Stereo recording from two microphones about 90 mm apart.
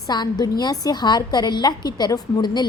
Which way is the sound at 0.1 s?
50° left (ahead or behind).